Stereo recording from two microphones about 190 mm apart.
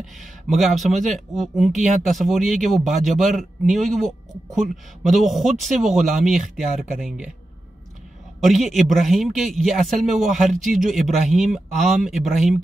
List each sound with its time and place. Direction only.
0.0 s speech: centre (ahead or behind)
8.4 s speech: centre (ahead or behind)
10.5 s speech: 40° right (ahead or behind)
10.9 s speech: centre (ahead or behind)